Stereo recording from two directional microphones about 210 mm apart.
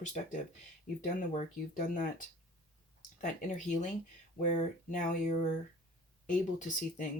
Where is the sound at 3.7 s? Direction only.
35° left (ahead or behind).